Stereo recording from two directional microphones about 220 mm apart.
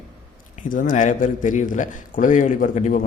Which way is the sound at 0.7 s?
35° left (ahead or behind).